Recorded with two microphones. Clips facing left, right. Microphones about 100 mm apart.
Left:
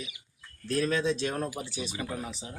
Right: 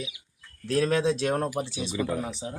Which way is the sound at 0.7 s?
75° right (ahead or behind).